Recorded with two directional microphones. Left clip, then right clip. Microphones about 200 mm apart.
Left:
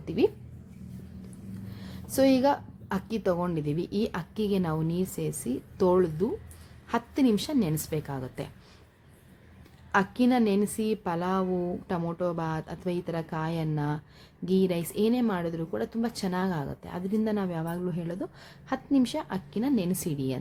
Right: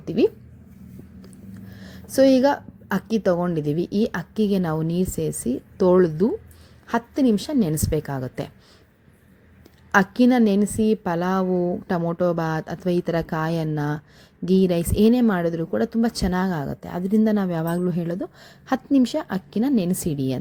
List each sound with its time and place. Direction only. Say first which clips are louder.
0.0 s speech: right 5 dB; 20° right (ahead or behind)
1.7 s a woman's voice: right 8 dB; 20° right (ahead or behind)
9.9 s a woman's voice: right 7 dB; 25° right (ahead or behind)